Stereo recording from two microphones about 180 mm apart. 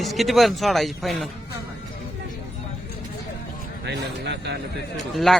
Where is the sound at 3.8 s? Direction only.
70° right (ahead or behind).